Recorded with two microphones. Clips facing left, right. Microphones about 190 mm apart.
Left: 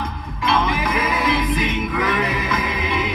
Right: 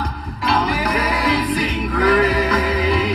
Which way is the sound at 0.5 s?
35° right (ahead or behind).